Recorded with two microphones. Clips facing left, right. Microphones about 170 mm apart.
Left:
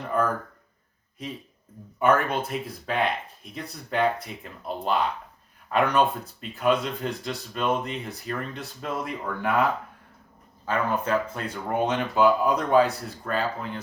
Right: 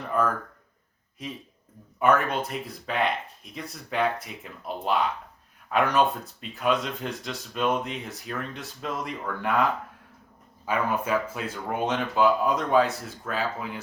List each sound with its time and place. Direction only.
2.0 s speech: centre (ahead or behind)
10.7 s speech: 10° right (ahead or behind)